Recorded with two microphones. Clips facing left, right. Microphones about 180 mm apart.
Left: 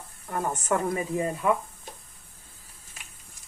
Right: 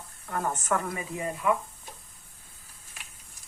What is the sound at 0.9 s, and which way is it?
Speech, 35° left (ahead or behind).